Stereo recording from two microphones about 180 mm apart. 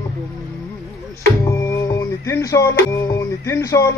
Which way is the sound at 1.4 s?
15° left (ahead or behind).